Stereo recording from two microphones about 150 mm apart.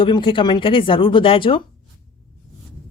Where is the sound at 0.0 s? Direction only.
35° left (ahead or behind).